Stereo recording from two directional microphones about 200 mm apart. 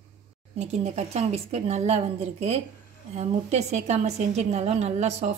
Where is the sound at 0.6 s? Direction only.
35° right (ahead or behind).